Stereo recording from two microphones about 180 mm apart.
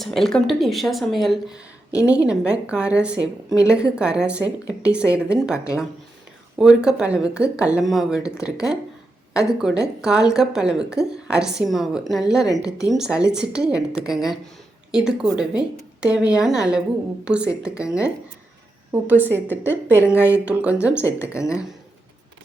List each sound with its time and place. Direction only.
0.0 s a woman's voice: centre (ahead or behind)
3.2 s a woman's voice: 20° left (ahead or behind)
3.9 s a woman's voice: 5° right (ahead or behind)
6.6 s a woman's voice: 5° right (ahead or behind)
12.5 s a woman's voice: 20° left (ahead or behind)
12.9 s a woman's voice: 5° right (ahead or behind)
19.3 s a woman's voice: 10° left (ahead or behind)
20.4 s speech: 5° right (ahead or behind)
21.0 s a woman's voice: 15° left (ahead or behind)